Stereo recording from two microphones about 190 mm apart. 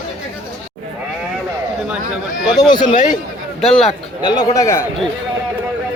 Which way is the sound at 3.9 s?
20° left (ahead or behind).